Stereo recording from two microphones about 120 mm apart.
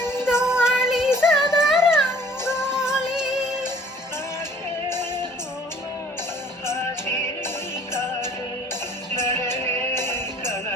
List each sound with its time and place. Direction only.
0.3 s music: 5° right (ahead or behind)
6.7 s music: 20° left (ahead or behind)
9.1 s music: 20° left (ahead or behind)